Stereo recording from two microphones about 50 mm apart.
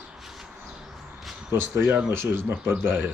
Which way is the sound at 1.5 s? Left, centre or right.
Right.